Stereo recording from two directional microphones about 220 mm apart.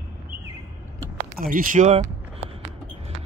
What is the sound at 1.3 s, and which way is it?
Speech, 40° right (ahead or behind).